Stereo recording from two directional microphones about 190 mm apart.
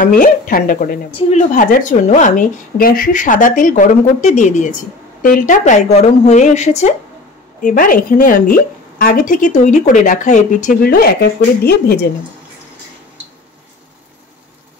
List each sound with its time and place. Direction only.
0.0 s a woman's voice: 45° left (ahead or behind)